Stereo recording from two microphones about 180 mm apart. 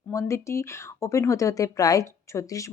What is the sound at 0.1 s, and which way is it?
Speech, 15° left (ahead or behind).